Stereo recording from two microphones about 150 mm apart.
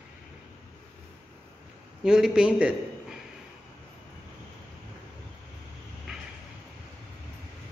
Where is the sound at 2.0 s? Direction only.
5° right (ahead or behind).